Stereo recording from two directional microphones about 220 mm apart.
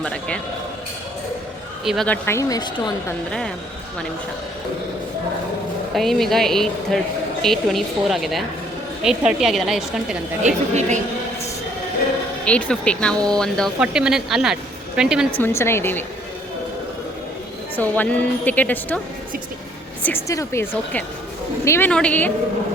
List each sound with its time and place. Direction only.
0.0 s speech: 5° left (ahead or behind)
1.8 s speech: centre (ahead or behind); by 2.9 s 20° left (ahead or behind)
5.9 s speech: centre (ahead or behind)
10.4 s a woman's voice: 35° right (ahead or behind)
12.5 s speech: 5° left (ahead or behind)
15.4 s speech: 10° left (ahead or behind)
17.7 s speech: 5° left (ahead or behind)
20.0 s speech: 10° left (ahead or behind)